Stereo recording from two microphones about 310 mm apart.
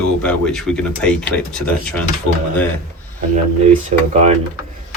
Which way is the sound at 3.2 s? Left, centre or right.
Right.